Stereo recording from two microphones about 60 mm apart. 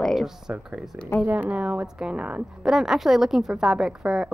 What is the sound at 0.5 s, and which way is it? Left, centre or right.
Speech, centre.